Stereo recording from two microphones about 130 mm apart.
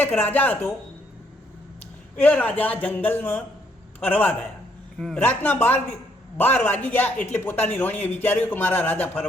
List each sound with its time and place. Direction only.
0.0 s a man's voice: 15° left (ahead or behind)
2.1 s a man's voice: 10° left (ahead or behind)
5.2 s a man's voice: 15° left (ahead or behind)